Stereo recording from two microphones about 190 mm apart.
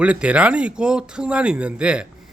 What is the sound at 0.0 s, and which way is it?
Speech, 5° right (ahead or behind).